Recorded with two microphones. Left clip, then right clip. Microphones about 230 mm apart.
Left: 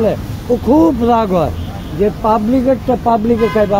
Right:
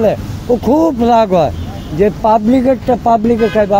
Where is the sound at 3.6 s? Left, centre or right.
Right.